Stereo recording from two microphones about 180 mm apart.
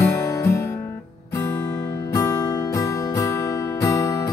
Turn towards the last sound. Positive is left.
turn(degrees=15)  # may be behind; listen again after turning